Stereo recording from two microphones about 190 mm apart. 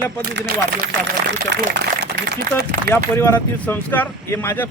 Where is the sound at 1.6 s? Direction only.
50° right (ahead or behind).